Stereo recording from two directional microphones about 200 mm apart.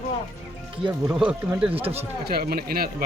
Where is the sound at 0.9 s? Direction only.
5° right (ahead or behind).